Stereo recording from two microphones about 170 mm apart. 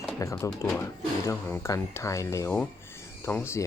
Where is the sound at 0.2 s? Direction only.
20° left (ahead or behind).